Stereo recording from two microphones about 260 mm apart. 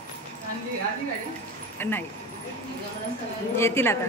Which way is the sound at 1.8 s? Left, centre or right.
Centre.